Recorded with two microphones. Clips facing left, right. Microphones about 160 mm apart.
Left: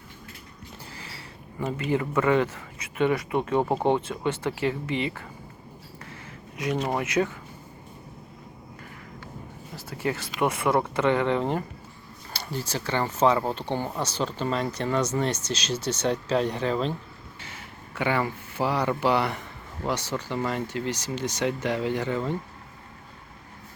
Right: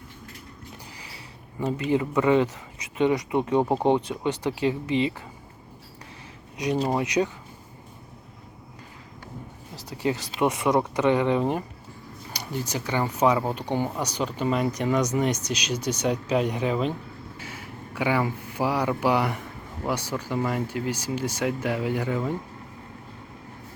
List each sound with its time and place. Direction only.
0.9 s speech: 15° right (ahead or behind)
6.7 s speech: 25° right (ahead or behind)
9.7 s a sound: 20° right (ahead or behind)
10.4 s speech: 20° right (ahead or behind)